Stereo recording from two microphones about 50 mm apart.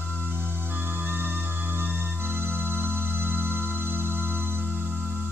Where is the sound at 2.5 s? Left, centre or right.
Right.